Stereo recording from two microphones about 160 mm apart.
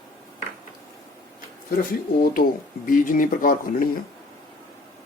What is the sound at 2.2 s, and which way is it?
A man's voice, 65° left (ahead or behind).